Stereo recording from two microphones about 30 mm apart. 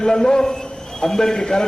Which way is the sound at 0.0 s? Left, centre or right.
Centre.